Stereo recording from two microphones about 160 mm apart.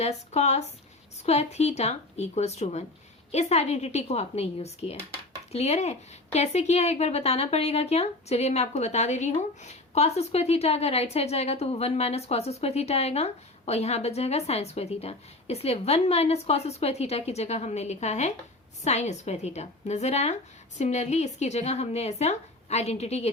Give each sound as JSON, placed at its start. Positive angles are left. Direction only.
{"t": 0.0, "sound": "a woman's voice", "side_deg": 45}